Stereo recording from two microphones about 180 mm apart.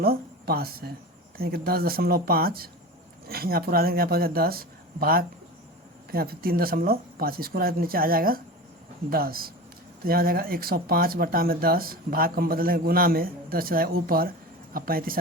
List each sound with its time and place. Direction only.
0.0 s a woman's voice: 55° right (ahead or behind)